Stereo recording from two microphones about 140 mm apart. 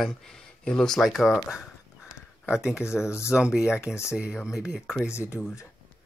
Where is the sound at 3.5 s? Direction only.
5° right (ahead or behind).